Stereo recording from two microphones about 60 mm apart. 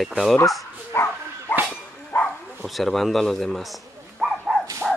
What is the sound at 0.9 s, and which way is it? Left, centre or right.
Speech, left.